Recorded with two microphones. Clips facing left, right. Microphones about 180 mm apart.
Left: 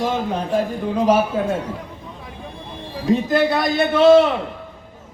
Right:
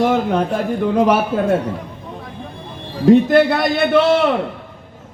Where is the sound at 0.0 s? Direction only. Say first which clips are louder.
Right 6 dB; 65° right (ahead or behind).